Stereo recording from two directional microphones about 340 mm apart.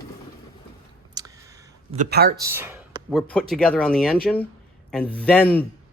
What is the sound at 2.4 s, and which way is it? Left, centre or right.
Speech, centre.